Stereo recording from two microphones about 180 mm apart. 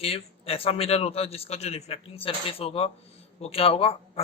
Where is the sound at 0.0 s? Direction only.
35° left (ahead or behind).